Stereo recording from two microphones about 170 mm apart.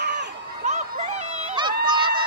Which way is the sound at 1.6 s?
25° right (ahead or behind).